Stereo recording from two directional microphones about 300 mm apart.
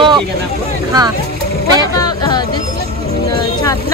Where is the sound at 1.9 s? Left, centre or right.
Centre.